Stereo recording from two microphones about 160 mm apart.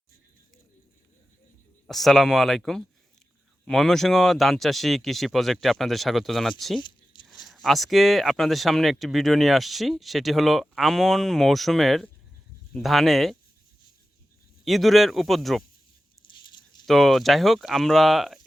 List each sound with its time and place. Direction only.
1.9 s speech: centre (ahead or behind)
6.7 s a sound: 30° left (ahead or behind)
7.3 s speech: centre (ahead or behind)
14.6 s speech: centre (ahead or behind)
16.5 s a sound: 25° left (ahead or behind)
16.8 s speech: centre (ahead or behind)